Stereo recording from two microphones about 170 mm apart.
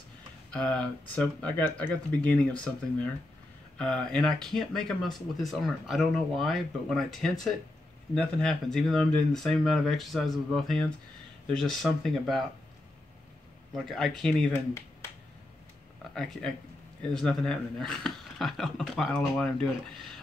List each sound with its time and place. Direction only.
0.5 s speech: 5° left (ahead or behind)
13.8 s speech: centre (ahead or behind)
14.5 s speech: 15° left (ahead or behind)
16.2 s speech: centre (ahead or behind)